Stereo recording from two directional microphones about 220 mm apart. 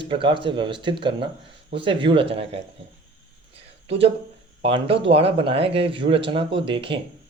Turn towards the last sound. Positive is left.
turn(degrees=-25)  # may be behind; listen again after turning